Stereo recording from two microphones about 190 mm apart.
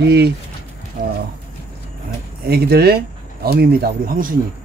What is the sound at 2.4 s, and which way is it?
Speech, 55° right (ahead or behind).